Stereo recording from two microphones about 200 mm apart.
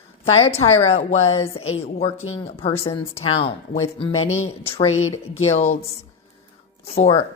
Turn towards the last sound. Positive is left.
turn(degrees=30)  # may be behind; listen again after turning